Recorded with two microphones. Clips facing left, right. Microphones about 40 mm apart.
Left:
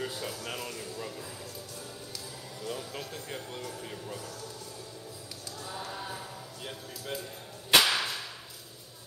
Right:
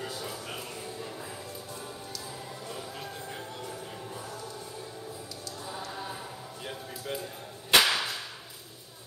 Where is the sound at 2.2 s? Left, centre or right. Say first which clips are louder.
Even; right.